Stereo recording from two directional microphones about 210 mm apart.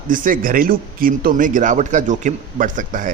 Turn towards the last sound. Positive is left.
turn(degrees=-40)  # may be behind; listen again after turning